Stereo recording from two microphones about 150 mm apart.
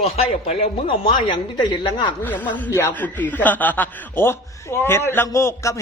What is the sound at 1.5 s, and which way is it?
Speech, 30° left (ahead or behind).